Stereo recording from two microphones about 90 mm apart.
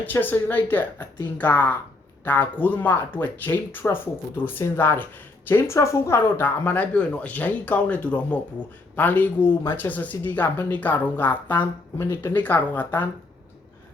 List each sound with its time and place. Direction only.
0.0 s speech: 20° left (ahead or behind)